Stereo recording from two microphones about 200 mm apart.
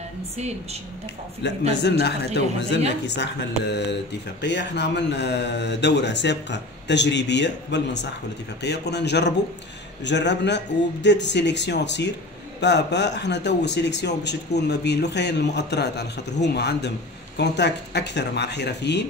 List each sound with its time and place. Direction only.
1.7 s speech: 60° left (ahead or behind)